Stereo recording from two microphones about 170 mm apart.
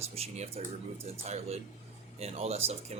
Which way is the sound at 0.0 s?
35° right (ahead or behind).